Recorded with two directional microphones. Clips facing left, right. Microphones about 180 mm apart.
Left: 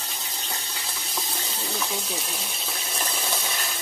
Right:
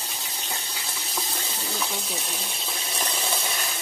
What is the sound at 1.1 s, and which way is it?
Water, centre (ahead or behind).